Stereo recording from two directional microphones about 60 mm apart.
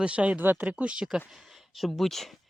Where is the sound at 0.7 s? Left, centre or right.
Centre.